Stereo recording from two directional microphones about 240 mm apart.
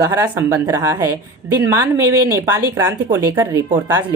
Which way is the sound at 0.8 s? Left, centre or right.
Centre.